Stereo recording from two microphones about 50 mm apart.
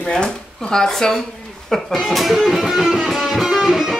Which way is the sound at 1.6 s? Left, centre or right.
Centre.